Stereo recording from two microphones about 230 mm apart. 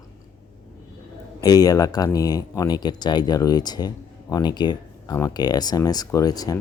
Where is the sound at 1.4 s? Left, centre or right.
Centre.